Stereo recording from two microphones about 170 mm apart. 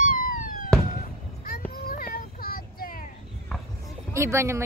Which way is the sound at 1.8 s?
55° left (ahead or behind).